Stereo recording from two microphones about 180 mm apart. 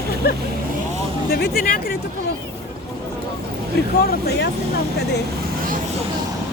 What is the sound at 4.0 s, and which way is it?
Speech, 60° left (ahead or behind).